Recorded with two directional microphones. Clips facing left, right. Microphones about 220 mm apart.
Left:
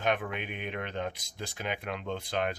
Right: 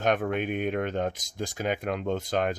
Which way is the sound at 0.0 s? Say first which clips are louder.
Right 6 dB; 45° right (ahead or behind).